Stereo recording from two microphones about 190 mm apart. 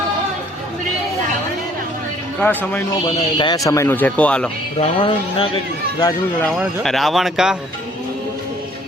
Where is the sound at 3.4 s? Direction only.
20° left (ahead or behind); by 4.5 s 5° left (ahead or behind).